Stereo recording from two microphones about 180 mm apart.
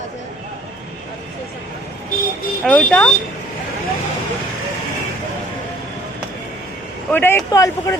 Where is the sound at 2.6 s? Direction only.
5° left (ahead or behind).